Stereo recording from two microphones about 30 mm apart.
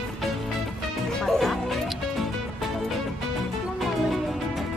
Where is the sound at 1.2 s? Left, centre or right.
Centre.